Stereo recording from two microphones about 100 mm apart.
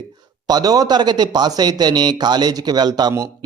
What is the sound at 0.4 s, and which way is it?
A man's voice, 40° right (ahead or behind).